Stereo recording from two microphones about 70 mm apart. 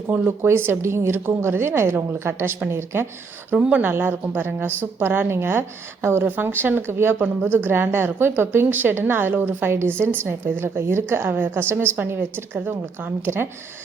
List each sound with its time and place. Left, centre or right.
0.3 s a woman's voice: right
3.5 s a woman's voice: centre; by 13.5 s right